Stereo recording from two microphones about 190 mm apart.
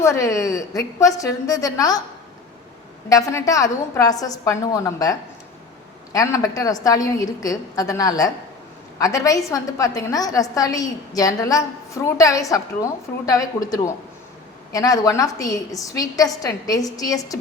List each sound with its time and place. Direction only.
0.0 s a woman's voice: 15° left (ahead or behind)
3.1 s a woman's voice: 15° left (ahead or behind)
6.1 s a woman's voice: 20° left (ahead or behind)